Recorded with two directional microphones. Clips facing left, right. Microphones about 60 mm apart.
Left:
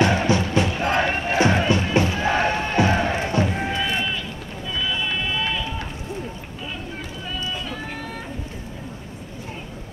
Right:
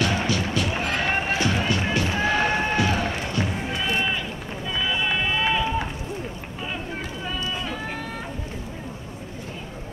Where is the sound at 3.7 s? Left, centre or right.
Right.